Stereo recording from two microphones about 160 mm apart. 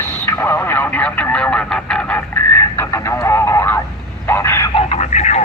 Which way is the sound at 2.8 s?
15° left (ahead or behind).